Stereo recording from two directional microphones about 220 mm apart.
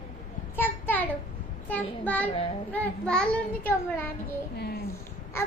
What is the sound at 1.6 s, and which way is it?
Speech, 5° left (ahead or behind).